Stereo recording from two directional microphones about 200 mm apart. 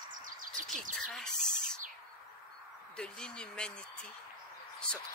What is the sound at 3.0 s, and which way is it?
Speech, 5° left (ahead or behind).